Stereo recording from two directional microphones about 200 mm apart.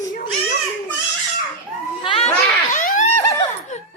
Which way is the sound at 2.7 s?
40° left (ahead or behind).